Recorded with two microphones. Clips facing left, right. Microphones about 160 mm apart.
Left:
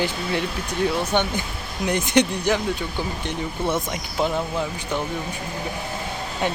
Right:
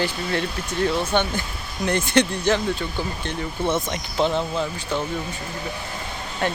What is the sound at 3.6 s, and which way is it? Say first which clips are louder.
Speech: right 2 dB; 10° left (ahead or behind).